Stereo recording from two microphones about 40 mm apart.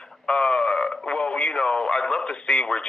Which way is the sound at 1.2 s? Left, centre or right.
Left.